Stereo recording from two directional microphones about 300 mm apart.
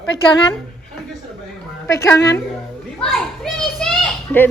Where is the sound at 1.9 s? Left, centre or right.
Centre.